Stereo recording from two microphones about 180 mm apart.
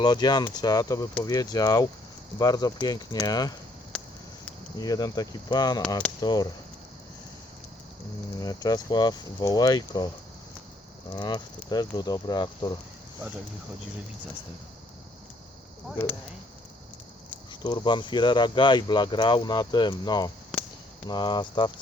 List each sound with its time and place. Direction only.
0.0 s speech: 25° left (ahead or behind)
3.9 s a sound: 5° left (ahead or behind)
4.8 s speech: 20° left (ahead or behind)
8.4 s speech: 20° left (ahead or behind)
11.1 s speech: 25° left (ahead or behind)
17.5 s speech: 25° left (ahead or behind)